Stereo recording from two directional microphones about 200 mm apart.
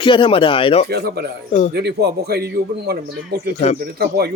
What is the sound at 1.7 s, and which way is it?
A man's voice, 55° right (ahead or behind).